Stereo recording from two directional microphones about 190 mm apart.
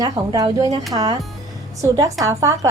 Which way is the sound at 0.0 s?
20° right (ahead or behind).